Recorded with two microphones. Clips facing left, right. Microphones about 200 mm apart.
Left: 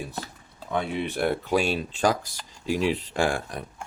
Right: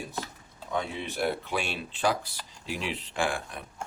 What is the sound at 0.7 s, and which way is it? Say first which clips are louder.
Speech: left 5 dB; 60° left (ahead or behind).